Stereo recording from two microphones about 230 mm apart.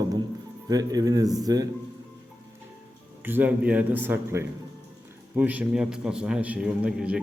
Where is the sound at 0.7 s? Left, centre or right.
Centre.